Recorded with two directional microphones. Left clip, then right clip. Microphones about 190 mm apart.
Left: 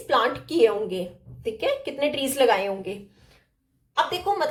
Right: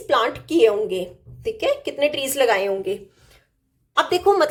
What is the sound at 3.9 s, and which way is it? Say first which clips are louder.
Speech: right 6 dB; 55° right (ahead or behind).